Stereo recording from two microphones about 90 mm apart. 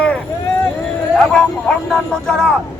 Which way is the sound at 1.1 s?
5° left (ahead or behind).